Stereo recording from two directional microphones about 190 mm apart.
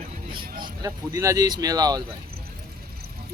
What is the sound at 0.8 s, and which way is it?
Speech, 15° right (ahead or behind).